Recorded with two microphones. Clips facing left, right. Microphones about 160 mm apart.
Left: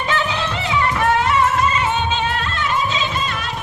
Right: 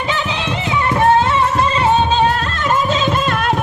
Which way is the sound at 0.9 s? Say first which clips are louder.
Right 6 dB; 25° right (ahead or behind).